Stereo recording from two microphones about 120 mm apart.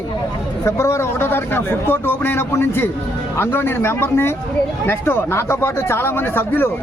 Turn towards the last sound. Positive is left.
turn(degrees=15)  # may be behind; listen again after turning